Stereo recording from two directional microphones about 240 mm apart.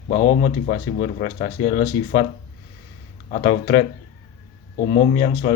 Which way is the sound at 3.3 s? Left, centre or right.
Left.